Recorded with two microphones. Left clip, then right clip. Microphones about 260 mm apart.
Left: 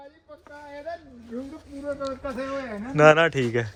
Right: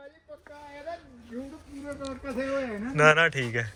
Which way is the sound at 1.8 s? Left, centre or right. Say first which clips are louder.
Left 7 dB; centre.